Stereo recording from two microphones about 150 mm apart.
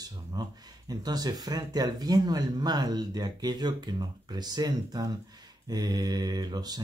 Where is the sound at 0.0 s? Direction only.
25° right (ahead or behind).